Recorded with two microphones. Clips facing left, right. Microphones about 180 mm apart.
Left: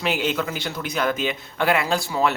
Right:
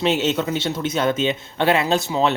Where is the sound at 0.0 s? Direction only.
25° right (ahead or behind).